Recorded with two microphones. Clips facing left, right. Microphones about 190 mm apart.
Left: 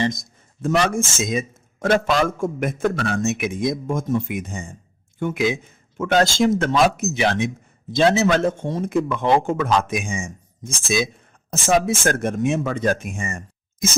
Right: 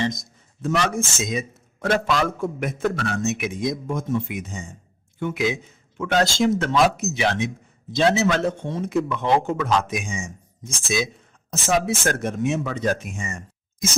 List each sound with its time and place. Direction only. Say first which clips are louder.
0.0 s a man's voice: left 2 dB; 50° left (ahead or behind)